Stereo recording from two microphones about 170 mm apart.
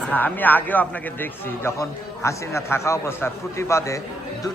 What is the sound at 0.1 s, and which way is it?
A man's voice, 10° left (ahead or behind).